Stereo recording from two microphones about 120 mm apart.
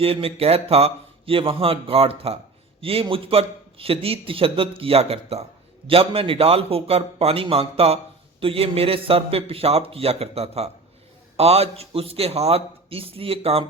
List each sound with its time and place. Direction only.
0.0 s a man's voice: 55° right (ahead or behind)